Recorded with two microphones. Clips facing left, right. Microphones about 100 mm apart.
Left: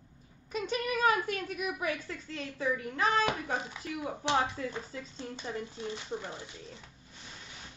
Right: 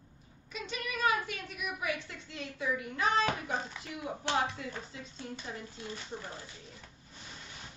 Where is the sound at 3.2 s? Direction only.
15° left (ahead or behind).